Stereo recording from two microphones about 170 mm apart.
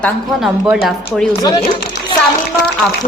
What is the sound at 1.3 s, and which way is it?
Speech, 25° left (ahead or behind).